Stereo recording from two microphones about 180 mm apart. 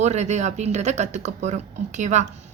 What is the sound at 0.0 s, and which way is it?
Speech, 40° right (ahead or behind).